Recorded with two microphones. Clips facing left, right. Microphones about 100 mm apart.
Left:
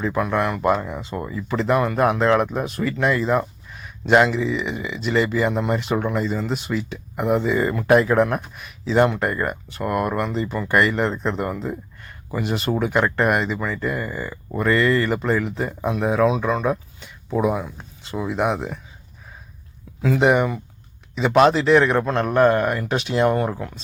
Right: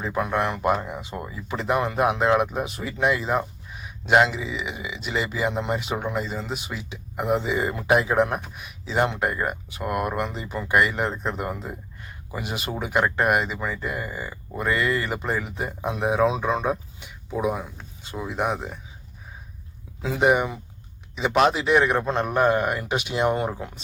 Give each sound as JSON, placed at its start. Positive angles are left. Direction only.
{"t": 0.0, "sound": "speech", "side_deg": -15}
{"t": 0.9, "sound": "speech", "side_deg": -5}
{"t": 17.3, "sound": "speech", "side_deg": 0}
{"t": 20.1, "sound": "speech", "side_deg": -5}